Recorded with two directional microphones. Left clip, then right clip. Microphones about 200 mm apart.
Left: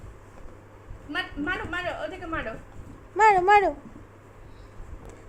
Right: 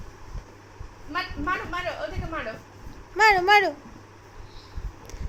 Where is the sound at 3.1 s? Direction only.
15° left (ahead or behind).